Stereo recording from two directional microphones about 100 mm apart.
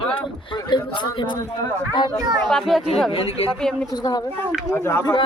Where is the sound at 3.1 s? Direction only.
70° left (ahead or behind).